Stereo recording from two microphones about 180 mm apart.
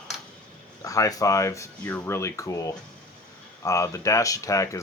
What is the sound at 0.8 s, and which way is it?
Speech, 20° left (ahead or behind).